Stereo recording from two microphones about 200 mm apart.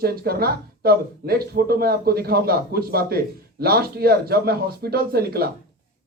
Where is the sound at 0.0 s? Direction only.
50° right (ahead or behind).